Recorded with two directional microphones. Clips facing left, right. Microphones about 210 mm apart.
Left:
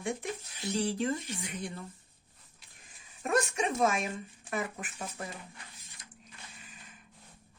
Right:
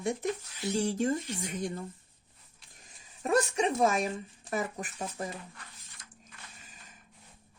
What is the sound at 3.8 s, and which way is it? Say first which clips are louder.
Speech: right 2 dB; 40° right (ahead or behind).